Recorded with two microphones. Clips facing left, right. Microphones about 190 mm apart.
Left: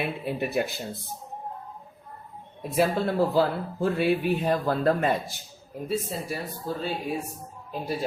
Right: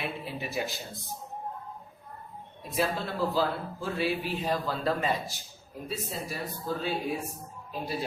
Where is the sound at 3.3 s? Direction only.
55° left (ahead or behind).